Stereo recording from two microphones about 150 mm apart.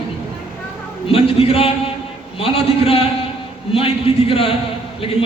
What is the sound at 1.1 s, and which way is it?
A man's voice, 40° left (ahead or behind).